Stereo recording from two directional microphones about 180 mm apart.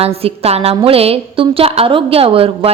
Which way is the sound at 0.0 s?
35° right (ahead or behind).